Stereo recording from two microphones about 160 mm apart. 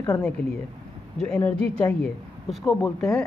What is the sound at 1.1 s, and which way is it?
A woman's voice, 5° left (ahead or behind).